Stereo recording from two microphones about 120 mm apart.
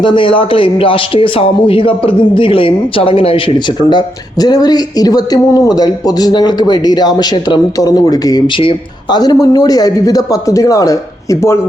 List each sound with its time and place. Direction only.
0.0 s speech: 45° left (ahead or behind); by 11.5 s 30° left (ahead or behind)